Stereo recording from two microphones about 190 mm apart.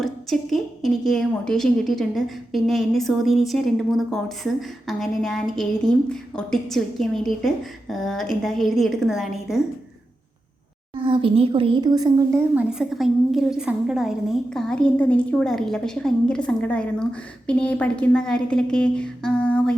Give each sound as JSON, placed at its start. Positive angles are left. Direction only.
{"t": 0.0, "sound": "a woman's voice", "side_deg": 0}
{"t": 11.0, "sound": "a woman's voice", "side_deg": -25}
{"t": 12.5, "sound": "a woman's voice", "side_deg": 0}